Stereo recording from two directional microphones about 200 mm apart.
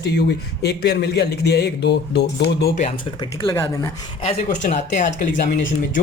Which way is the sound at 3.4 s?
15° left (ahead or behind).